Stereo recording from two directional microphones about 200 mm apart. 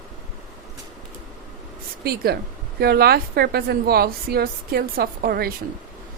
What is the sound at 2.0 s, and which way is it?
A woman's voice, 50° right (ahead or behind).